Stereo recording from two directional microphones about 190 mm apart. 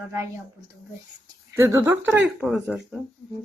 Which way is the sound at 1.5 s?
15° right (ahead or behind).